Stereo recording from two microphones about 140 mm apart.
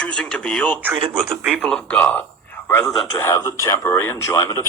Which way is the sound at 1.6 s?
5° left (ahead or behind).